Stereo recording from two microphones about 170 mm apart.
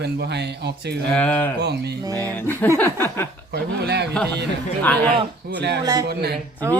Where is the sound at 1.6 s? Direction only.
75° right (ahead or behind).